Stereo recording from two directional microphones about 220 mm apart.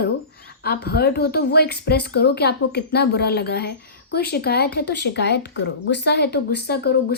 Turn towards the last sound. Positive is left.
turn(degrees=45)  # may be behind; listen again after turning